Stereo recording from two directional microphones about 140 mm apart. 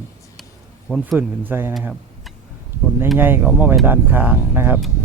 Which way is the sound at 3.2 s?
15° right (ahead or behind).